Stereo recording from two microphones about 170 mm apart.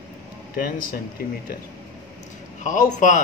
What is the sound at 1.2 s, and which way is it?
Speech, 60° left (ahead or behind).